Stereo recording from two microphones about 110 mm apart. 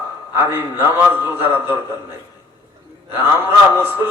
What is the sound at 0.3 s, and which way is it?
A man's voice, 20° right (ahead or behind).